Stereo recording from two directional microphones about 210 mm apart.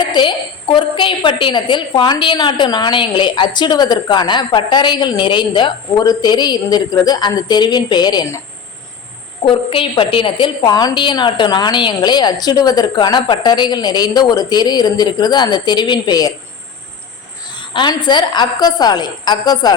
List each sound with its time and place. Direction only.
0.1 s a woman's voice: 20° left (ahead or behind)
9.4 s a woman's voice: 25° left (ahead or behind)
17.7 s a woman's voice: 20° left (ahead or behind)